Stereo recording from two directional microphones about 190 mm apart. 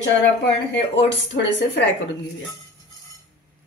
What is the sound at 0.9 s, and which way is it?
Speech, 70° left (ahead or behind).